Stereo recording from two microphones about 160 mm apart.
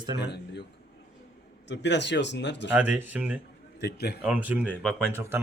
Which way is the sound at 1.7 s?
90° left.